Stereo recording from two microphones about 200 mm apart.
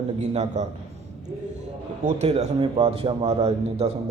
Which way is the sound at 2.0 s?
30° right (ahead or behind).